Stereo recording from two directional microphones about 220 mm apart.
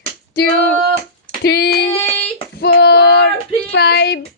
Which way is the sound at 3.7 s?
50° left (ahead or behind).